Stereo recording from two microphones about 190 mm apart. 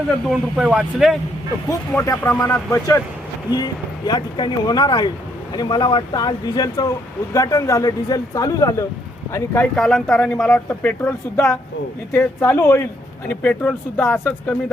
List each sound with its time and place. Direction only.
0.3 s speech: centre (ahead or behind)
1.9 s speech: 10° left (ahead or behind)
9.3 s speech: 5° left (ahead or behind)